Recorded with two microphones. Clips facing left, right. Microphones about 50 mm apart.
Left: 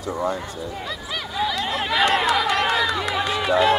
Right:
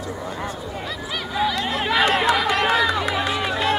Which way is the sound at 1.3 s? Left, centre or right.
Centre.